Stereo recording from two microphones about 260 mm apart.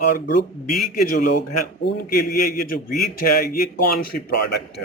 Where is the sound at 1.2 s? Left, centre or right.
Left.